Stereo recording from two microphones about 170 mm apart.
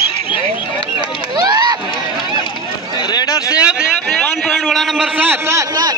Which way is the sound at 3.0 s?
25° left (ahead or behind).